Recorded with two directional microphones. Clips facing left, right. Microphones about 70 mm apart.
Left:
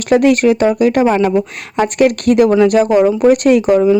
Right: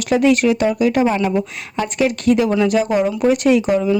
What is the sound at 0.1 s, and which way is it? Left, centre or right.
Speech, left.